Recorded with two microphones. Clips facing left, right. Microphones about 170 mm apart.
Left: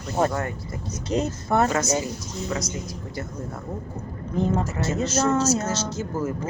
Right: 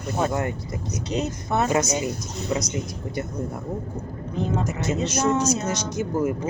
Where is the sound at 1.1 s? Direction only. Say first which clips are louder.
Left 2 dB; 30° left (ahead or behind).